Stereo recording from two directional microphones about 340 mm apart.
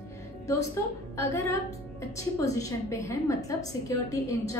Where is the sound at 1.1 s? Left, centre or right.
Centre.